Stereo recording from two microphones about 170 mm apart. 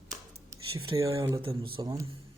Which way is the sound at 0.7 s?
30° right (ahead or behind).